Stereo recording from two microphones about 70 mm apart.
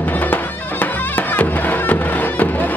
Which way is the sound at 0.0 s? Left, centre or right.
Left.